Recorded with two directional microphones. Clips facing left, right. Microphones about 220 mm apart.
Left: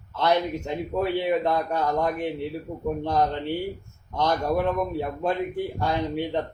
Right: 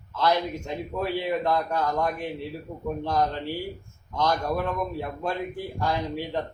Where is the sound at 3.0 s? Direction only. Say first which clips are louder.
Left 1 dB; 20° left (ahead or behind).